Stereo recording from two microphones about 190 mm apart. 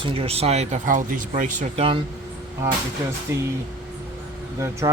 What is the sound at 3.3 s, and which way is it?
Speech, 15° right (ahead or behind).